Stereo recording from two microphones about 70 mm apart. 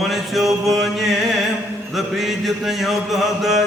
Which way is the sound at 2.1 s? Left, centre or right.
Centre.